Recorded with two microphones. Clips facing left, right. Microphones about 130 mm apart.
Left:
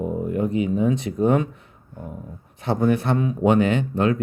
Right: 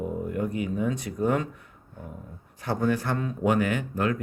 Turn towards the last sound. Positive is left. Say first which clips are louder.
# left 6 dB
turn(degrees=25)  # may be behind; listen again after turning